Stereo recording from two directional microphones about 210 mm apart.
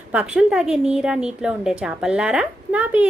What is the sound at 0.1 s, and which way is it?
A woman's voice, 5° right (ahead or behind).